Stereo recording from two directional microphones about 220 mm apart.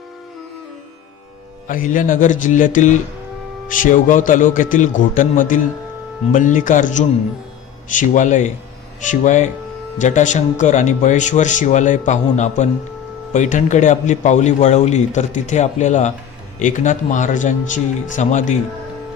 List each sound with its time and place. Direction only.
1.6 s a man's voice: 35° left (ahead or behind)